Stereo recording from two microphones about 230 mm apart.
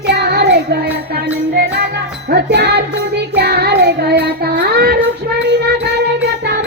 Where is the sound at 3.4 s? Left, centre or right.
Right.